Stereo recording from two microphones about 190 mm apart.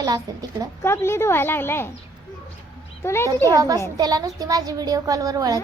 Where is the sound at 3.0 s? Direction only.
15° left (ahead or behind).